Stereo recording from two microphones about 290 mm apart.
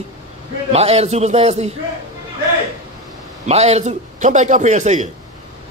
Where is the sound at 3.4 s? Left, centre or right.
Right.